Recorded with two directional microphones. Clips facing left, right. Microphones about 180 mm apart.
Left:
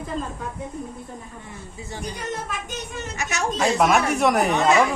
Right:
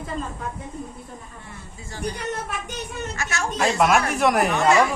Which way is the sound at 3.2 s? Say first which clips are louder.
Left 3 dB; 20° left (ahead or behind).